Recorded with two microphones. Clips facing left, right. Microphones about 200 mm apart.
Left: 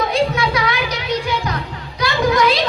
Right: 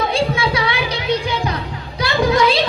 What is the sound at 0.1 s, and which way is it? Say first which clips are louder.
Music: left 1 dB; 30° right (ahead or behind).